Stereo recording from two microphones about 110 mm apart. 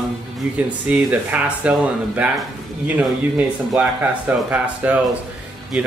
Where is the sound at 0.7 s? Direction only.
15° right (ahead or behind).